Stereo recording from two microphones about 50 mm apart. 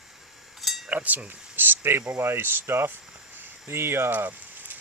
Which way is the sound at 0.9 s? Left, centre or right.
Right.